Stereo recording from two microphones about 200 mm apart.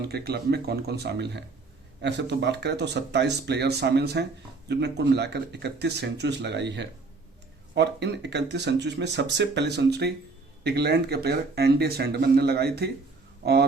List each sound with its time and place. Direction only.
0.0 s speech: 55° right (ahead or behind)